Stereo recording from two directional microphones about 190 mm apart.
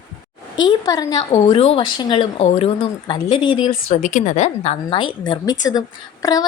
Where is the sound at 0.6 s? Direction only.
20° left (ahead or behind).